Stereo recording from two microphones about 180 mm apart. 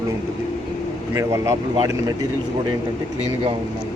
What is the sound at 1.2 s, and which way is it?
Speech, 15° right (ahead or behind).